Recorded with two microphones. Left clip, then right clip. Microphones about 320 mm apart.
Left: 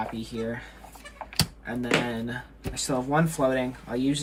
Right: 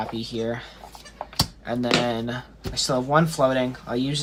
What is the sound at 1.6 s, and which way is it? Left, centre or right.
Speech, centre.